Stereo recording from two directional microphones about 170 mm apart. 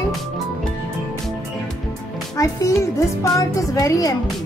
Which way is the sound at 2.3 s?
20° left (ahead or behind).